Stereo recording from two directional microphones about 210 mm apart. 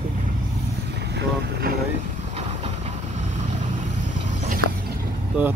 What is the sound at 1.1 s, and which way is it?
Speech, 45° right (ahead or behind).